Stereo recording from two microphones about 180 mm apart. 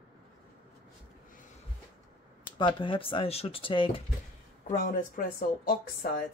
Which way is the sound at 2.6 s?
25° left (ahead or behind).